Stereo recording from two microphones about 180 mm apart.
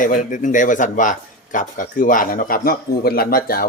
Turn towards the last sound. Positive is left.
turn(degrees=55)  # may be behind; listen again after turning